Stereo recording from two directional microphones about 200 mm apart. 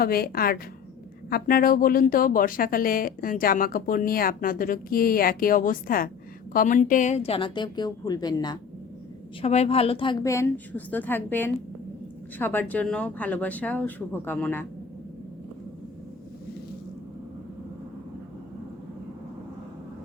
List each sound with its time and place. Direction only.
0.0 s a woman's voice: 50° left (ahead or behind); by 8.5 s 20° left (ahead or behind)
9.4 s speech: 30° left (ahead or behind); by 14.7 s 10° left (ahead or behind)